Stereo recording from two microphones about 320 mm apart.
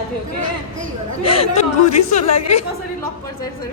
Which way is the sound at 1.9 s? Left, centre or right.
Left.